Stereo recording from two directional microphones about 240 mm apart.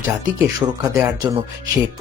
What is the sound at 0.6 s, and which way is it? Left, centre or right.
Speech, centre.